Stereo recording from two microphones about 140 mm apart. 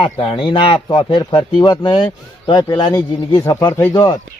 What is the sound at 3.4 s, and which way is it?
Speech, 20° left (ahead or behind).